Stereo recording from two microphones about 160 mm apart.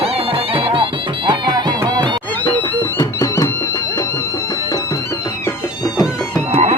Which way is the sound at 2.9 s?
20° left (ahead or behind).